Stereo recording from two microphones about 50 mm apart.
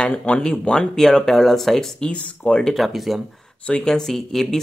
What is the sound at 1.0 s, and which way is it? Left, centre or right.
Speech, centre.